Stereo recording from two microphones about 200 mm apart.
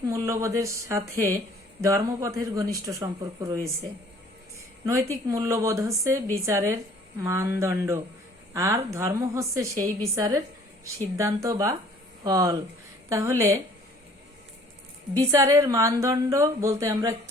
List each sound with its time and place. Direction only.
0.0 s a woman's voice: 15° right (ahead or behind)
4.9 s a woman's voice: 15° right (ahead or behind)
15.2 s a woman's voice: 15° right (ahead or behind)